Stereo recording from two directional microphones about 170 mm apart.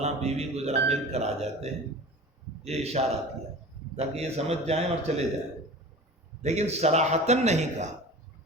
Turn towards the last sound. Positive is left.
turn(degrees=-40)  # may be behind; listen again after turning